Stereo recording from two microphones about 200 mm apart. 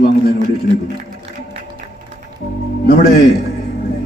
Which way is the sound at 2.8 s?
50° left (ahead or behind).